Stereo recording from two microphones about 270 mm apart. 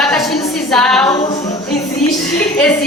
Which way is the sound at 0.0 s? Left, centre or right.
Centre.